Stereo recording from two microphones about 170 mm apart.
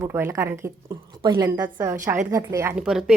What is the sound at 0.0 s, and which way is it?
Speech, 15° right (ahead or behind).